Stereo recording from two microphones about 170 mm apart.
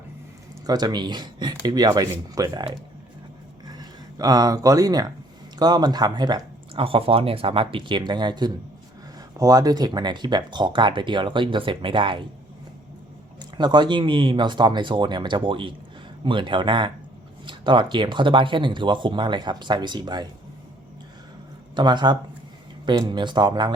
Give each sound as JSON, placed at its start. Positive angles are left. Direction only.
{"t": 0.7, "sound": "speech", "side_deg": -25}
{"t": 13.4, "sound": "speech", "side_deg": -25}
{"t": 21.8, "sound": "speech", "side_deg": -25}